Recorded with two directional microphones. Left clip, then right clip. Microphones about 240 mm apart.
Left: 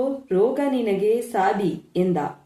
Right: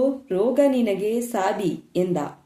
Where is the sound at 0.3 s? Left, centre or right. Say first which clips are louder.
Even; right.